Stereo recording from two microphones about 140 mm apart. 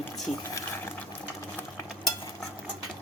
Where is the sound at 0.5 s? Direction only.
15° left (ahead or behind).